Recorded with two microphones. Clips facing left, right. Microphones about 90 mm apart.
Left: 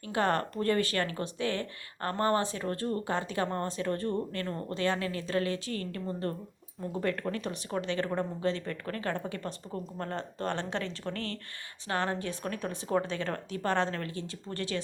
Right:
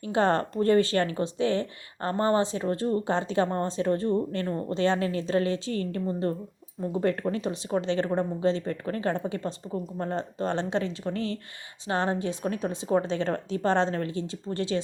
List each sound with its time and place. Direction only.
0.0 s speech: 25° right (ahead or behind)